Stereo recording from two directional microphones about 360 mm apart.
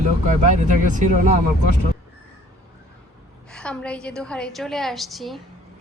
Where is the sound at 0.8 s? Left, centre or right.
Right.